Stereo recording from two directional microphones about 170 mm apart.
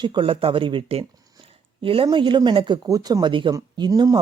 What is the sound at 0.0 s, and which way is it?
Speech, 30° right (ahead or behind).